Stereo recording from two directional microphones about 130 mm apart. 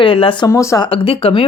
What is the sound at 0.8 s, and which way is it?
Speech, 45° left (ahead or behind).